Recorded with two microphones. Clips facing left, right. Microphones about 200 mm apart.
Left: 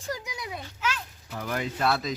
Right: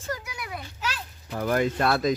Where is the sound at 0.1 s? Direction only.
20° left (ahead or behind).